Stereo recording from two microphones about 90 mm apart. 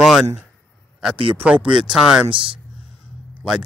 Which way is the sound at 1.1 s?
80° right.